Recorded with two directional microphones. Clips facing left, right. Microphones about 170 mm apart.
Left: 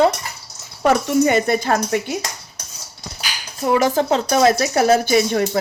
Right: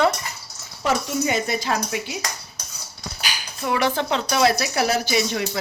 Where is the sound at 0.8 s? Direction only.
55° left (ahead or behind).